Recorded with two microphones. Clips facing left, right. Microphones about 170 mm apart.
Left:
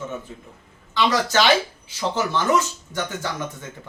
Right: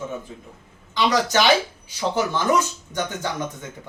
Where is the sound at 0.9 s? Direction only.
15° right (ahead or behind).